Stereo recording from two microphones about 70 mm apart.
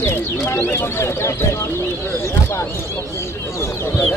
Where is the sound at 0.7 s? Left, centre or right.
Left.